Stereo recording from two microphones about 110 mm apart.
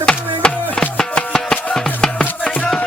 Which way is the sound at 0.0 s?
10° left (ahead or behind).